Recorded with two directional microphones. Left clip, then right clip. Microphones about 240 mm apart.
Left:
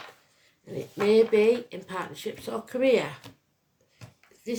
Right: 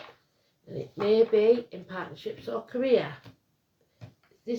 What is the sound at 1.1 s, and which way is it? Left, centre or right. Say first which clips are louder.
Speech: left 1 dB; left.